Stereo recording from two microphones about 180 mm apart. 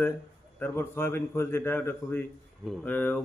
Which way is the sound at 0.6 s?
15° left (ahead or behind).